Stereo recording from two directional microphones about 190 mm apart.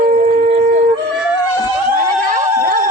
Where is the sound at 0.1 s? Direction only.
40° right (ahead or behind).